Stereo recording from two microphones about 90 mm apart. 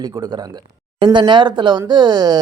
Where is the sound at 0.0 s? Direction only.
55° right (ahead or behind).